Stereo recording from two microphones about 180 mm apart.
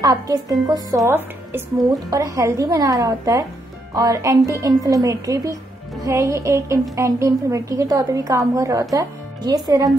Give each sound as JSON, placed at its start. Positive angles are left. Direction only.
{"t": 0.0, "sound": "a woman's voice", "side_deg": -20}